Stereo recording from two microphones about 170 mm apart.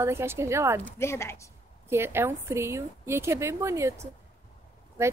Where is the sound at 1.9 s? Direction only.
15° right (ahead or behind).